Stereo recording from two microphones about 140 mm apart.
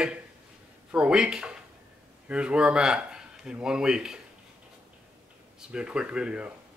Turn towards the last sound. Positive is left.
turn(degrees=-5)  # may be behind; listen again after turning